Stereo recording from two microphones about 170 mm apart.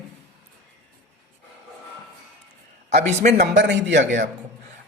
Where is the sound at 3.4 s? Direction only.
90° right.